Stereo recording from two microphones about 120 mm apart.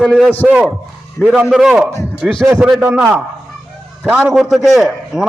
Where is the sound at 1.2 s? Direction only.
10° right (ahead or behind).